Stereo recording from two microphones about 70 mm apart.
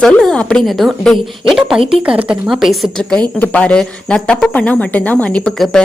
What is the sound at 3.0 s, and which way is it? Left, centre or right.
Speech, centre.